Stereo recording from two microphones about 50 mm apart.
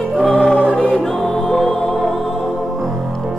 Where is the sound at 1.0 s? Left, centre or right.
Centre.